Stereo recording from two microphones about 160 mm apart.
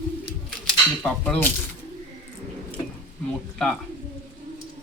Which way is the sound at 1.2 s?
10° left (ahead or behind).